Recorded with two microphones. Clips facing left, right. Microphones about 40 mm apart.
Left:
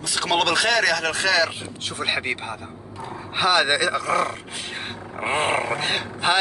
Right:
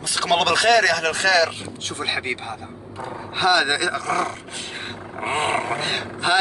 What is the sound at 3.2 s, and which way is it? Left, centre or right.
A man's voice, centre.